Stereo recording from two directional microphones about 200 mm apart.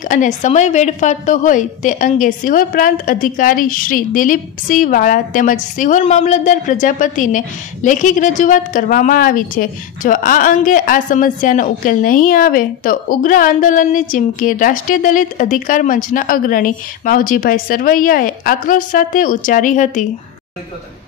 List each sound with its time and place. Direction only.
0.1 s a woman's voice: 40° left (ahead or behind)